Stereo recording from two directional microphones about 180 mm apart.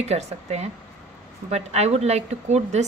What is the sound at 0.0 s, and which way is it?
A woman's voice, 35° right (ahead or behind).